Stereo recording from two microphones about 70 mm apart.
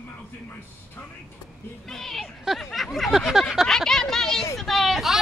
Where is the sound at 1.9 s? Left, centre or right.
Centre.